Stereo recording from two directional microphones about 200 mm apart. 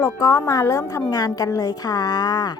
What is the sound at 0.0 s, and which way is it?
A woman's voice, 15° left (ahead or behind).